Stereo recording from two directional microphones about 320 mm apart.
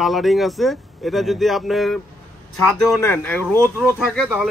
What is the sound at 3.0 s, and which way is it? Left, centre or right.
Speech, centre.